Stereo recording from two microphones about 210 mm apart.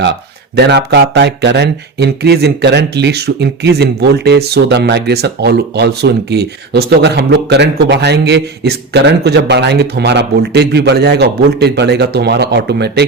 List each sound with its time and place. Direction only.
0.5 s speech: 50° right (ahead or behind)